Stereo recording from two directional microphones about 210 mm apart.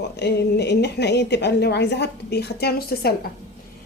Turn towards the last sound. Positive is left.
turn(degrees=45)  # may be behind; listen again after turning